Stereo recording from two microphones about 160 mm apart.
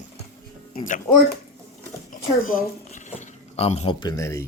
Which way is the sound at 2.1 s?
60° left (ahead or behind).